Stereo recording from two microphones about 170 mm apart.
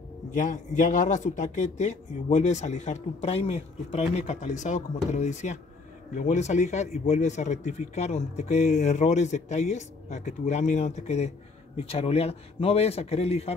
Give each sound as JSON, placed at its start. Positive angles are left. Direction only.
{"t": 0.3, "sound": "a man's voice", "side_deg": 50}